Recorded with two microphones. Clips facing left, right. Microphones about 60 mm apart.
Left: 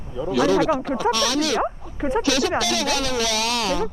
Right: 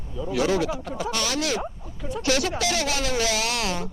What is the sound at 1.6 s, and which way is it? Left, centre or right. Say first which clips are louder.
Speech: left 10 dB; left.